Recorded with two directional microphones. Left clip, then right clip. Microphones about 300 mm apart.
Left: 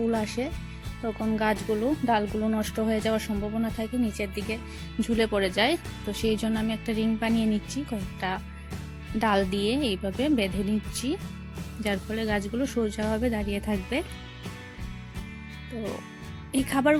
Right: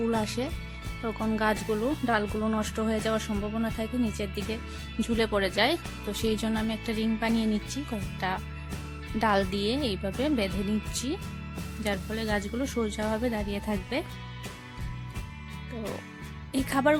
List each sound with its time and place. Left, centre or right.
0.1 s speech: centre
16.5 s speech: centre